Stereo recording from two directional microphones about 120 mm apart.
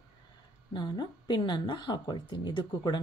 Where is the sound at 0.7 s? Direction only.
40° left (ahead or behind).